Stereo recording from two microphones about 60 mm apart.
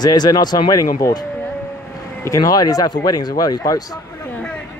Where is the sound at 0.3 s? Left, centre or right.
Left.